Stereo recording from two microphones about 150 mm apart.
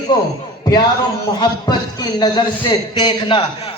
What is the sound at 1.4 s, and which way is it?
Speech, 25° left (ahead or behind).